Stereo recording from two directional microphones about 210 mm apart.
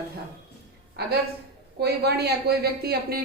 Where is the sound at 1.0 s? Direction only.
50° right (ahead or behind).